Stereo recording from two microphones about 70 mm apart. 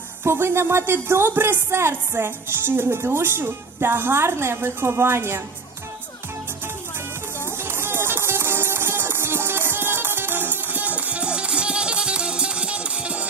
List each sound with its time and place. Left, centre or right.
0.3 s a woman's voice: right
7.6 s music: right; by 13.2 s centre